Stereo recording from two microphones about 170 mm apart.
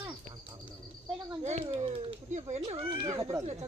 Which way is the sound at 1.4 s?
35° right (ahead or behind).